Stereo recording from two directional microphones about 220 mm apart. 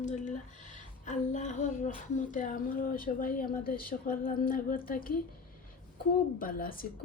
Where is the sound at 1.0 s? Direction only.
35° left (ahead or behind).